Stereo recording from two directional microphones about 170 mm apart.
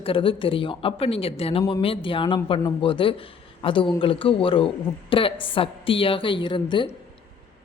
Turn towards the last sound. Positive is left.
turn(degrees=30)  # may be behind; listen again after turning